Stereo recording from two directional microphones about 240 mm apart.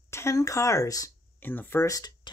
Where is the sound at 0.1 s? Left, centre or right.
Centre.